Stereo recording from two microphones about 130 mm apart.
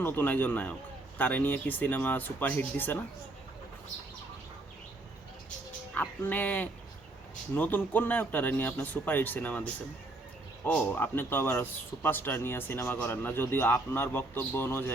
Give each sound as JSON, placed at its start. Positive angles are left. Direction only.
{"t": 0.0, "sound": "speech", "side_deg": 15}
{"t": 5.9, "sound": "speech", "side_deg": 15}
{"t": 10.7, "sound": "speech", "side_deg": 15}